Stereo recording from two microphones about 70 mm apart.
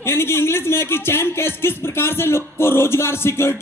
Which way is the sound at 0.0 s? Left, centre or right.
Left.